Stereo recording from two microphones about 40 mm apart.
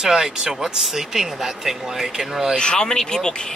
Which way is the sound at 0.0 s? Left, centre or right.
Centre.